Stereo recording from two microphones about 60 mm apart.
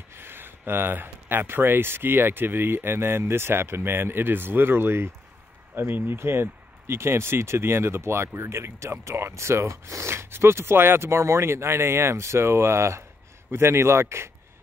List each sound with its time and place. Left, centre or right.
0.1 s speech: right